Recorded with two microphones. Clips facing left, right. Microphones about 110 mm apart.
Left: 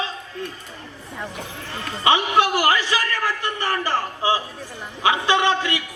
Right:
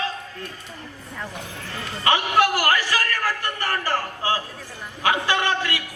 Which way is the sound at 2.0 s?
20° left (ahead or behind).